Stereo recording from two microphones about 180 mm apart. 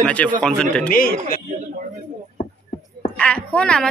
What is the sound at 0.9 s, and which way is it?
Speech, 55° left (ahead or behind).